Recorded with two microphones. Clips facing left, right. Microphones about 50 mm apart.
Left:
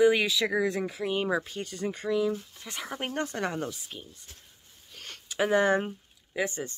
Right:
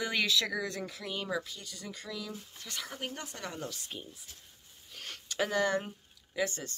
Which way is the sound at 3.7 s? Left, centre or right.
Centre.